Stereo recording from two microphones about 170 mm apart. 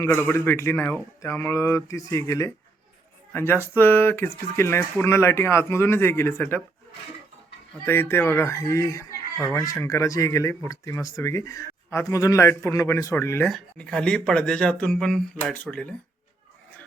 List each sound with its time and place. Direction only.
0.0 s speech: 10° left (ahead or behind)
7.9 s speech: 15° left (ahead or behind)